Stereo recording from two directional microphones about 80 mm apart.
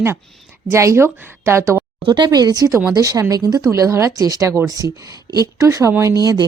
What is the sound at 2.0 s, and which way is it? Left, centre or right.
A woman's voice, right.